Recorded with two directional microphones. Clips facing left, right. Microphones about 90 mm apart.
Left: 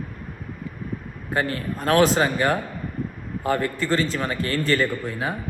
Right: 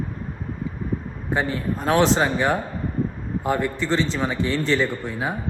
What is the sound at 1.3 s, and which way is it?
Speech, centre (ahead or behind).